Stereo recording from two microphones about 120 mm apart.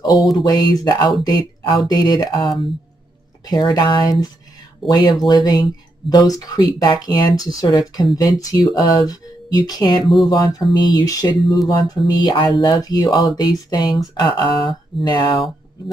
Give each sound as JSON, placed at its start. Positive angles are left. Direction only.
{"t": 0.4, "sound": "speech", "side_deg": 30}
{"t": 3.4, "sound": "speech", "side_deg": 30}